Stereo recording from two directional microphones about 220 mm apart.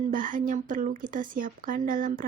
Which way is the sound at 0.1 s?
35° right (ahead or behind).